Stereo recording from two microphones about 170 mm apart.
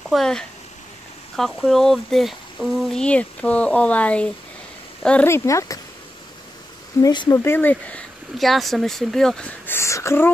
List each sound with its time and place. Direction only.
0.1 s speech: 5° left (ahead or behind)
7.0 s speech: 25° left (ahead or behind)